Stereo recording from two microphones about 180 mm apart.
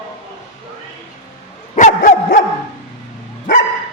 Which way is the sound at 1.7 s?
45° left (ahead or behind).